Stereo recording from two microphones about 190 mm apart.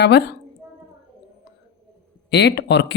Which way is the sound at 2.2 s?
60° left (ahead or behind).